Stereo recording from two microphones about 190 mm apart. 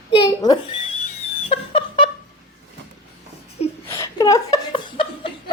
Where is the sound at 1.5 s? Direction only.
30° left (ahead or behind).